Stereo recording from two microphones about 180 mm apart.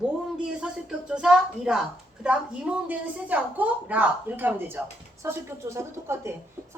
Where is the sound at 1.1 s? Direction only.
5° right (ahead or behind).